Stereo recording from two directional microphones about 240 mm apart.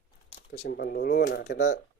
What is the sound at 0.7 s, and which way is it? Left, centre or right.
Speech, left.